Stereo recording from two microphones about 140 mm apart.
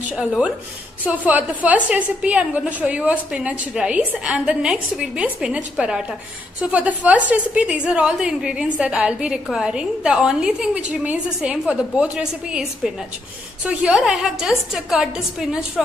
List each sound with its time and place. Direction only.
1.0 s a woman's voice: 10° right (ahead or behind)